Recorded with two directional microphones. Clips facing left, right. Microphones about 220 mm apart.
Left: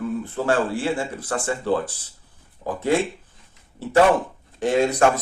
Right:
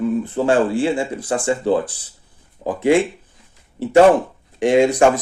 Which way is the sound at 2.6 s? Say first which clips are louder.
Right 5 dB; 35° right (ahead or behind).